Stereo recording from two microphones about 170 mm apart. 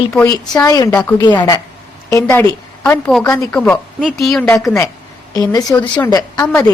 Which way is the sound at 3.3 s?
20° left (ahead or behind).